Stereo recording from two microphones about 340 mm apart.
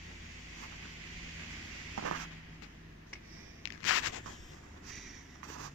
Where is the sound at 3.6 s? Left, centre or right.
Left.